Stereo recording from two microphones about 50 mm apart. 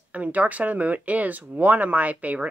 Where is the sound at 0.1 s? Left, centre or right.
Right.